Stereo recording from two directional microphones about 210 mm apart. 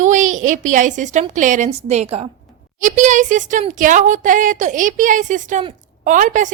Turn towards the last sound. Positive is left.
turn(degrees=-40)  # may be behind; listen again after turning